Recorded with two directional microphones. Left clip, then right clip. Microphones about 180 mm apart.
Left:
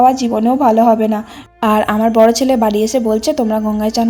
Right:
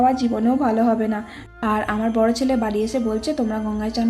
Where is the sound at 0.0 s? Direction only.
35° left (ahead or behind).